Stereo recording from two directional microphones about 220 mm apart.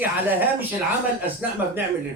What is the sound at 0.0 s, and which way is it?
Speech, 10° right (ahead or behind).